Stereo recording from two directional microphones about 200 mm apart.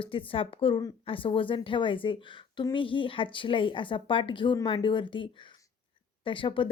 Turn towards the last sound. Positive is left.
turn(degrees=25)  # may be behind; listen again after turning